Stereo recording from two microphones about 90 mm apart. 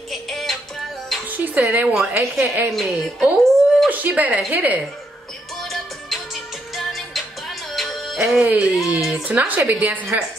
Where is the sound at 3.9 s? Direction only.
20° right (ahead or behind).